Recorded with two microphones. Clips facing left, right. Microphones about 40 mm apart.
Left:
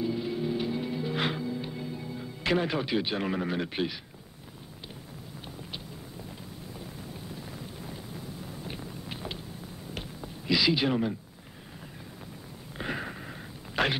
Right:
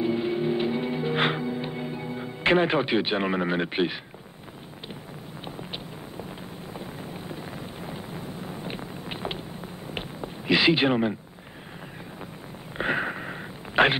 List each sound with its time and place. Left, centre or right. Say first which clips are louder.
0.0 s music: right 5 dB; right
6.7 s wind noise: right 6 dB; right
12.7 s a sound: right 8 dB; right